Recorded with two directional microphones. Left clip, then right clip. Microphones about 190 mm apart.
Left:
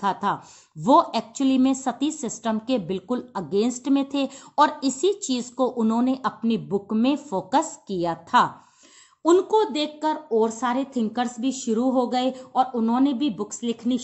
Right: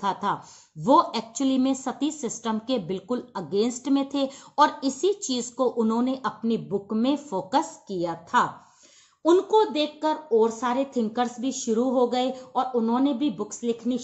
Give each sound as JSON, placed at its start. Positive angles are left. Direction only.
{"t": 0.0, "sound": "a woman's voice", "side_deg": 30}